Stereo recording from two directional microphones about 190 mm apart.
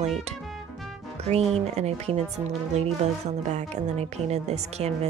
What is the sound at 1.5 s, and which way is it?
Speech, 35° right (ahead or behind).